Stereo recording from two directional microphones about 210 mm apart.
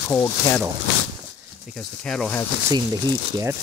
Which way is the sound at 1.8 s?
Centre (ahead or behind).